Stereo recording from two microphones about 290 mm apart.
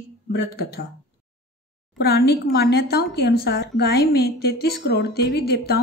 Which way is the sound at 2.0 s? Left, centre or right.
Left.